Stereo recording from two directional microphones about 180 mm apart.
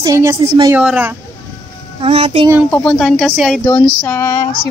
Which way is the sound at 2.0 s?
35° right (ahead or behind).